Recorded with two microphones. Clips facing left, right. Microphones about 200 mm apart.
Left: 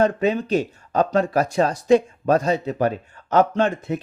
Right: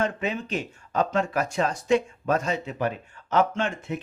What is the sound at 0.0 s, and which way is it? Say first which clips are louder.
Speech: left 8 dB; 35° left (ahead or behind).